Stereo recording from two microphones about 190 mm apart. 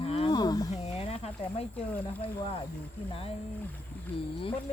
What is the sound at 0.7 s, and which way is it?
Speech, 35° left (ahead or behind).